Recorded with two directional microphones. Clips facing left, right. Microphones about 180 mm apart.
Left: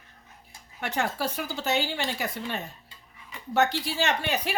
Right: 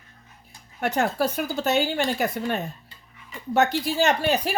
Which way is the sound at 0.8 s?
45° right (ahead or behind).